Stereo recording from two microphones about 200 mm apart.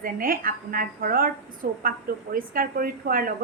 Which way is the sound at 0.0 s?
45° right (ahead or behind).